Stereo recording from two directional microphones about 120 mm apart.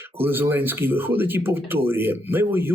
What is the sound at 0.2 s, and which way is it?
Speech, 15° right (ahead or behind).